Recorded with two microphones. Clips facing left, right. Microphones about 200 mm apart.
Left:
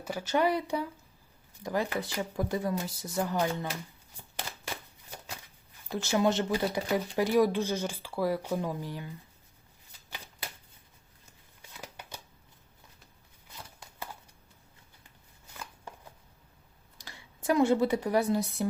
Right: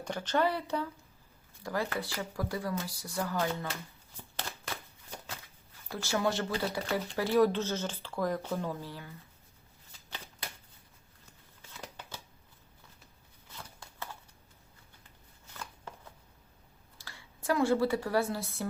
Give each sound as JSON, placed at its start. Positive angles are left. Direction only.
{"t": 0.0, "sound": "speech", "side_deg": 5}
{"t": 4.7, "sound": "shuffling cards", "side_deg": 15}
{"t": 5.9, "sound": "speech", "side_deg": 20}
{"t": 11.9, "sound": "shuffling cards", "side_deg": 15}
{"t": 17.0, "sound": "speech", "side_deg": 20}